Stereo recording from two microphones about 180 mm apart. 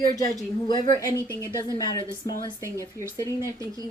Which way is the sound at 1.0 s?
15° right (ahead or behind).